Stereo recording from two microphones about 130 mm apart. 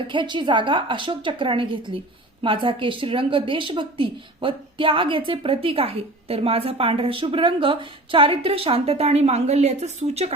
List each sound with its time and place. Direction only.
0.1 s a woman's voice: 40° right (ahead or behind); by 10.3 s 55° right (ahead or behind)